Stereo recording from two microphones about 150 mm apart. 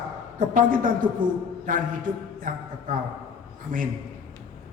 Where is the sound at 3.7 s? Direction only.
65° right (ahead or behind).